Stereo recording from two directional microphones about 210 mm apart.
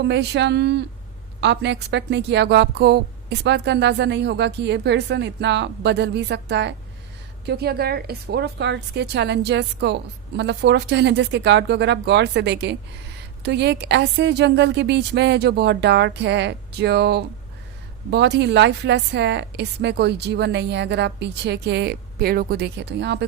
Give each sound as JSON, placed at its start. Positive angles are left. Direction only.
{"t": 0.0, "sound": "a woman's voice", "side_deg": -55}